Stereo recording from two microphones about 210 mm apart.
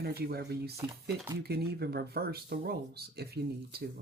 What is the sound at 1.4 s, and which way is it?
Speech, 50° right (ahead or behind).